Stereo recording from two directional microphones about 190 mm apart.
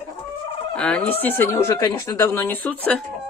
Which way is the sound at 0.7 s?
5° left (ahead or behind).